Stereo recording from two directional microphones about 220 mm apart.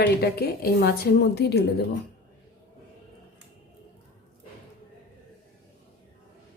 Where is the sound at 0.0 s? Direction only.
45° left (ahead or behind).